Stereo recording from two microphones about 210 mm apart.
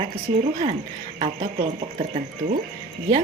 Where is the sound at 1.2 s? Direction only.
30° right (ahead or behind).